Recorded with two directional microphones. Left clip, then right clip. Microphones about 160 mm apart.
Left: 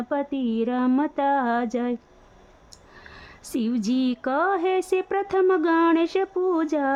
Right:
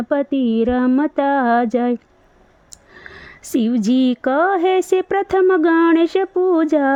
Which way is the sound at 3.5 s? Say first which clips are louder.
Right 8 dB; 35° right (ahead or behind).